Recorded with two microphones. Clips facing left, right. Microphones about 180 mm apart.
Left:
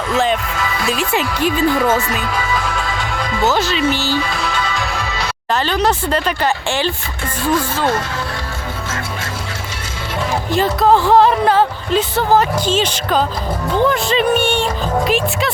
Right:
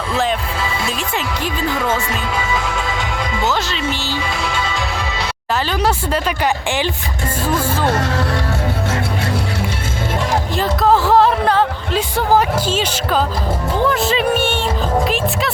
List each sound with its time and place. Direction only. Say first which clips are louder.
0.9 s speech: left 4 dB; 5° left (ahead or behind)
1.4 s speech: left 8 dB; 20° right (ahead or behind)
2.5 s music: even; 20° right (ahead or behind)
4.0 s music: left 3 dB; 20° right (ahead or behind)
5.6 s speech: left 2 dB; 10° right (ahead or behind)
10.5 s speech: left 3 dB; centre (ahead or behind)
11.9 s speech: left 1 dB; 10° right (ahead or behind)